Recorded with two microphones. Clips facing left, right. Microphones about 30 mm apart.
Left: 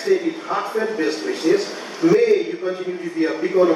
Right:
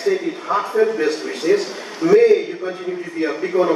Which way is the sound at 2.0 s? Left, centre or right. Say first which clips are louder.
Right 1 dB; left.